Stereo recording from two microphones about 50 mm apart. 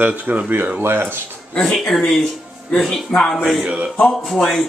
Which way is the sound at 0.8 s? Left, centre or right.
Right.